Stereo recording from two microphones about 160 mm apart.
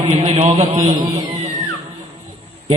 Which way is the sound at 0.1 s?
40° right (ahead or behind).